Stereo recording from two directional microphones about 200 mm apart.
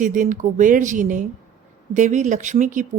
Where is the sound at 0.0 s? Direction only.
40° right (ahead or behind).